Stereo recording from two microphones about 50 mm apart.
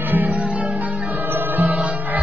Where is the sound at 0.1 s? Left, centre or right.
Right.